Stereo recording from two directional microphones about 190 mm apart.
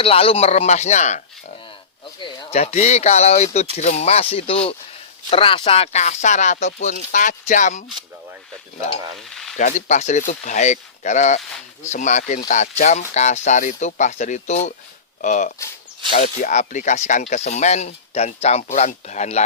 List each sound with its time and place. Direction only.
0.0 s speech: 30° left (ahead or behind)
2.1 s speech: 25° left (ahead or behind)
9.1 s sizzle: centre (ahead or behind)
9.6 s speech: 40° left (ahead or behind)